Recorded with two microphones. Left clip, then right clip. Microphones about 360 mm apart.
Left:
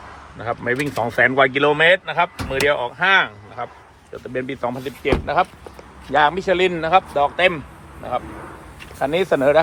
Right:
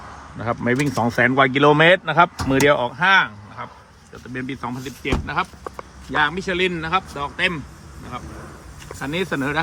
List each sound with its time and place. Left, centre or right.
0.3 s speech: centre
5.0 s a man's voice: centre
9.0 s a man's voice: centre